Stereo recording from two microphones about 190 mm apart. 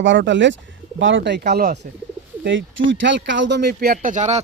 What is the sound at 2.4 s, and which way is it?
Speech, 80° right.